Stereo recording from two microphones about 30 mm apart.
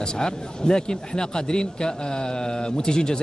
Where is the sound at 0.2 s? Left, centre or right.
Left.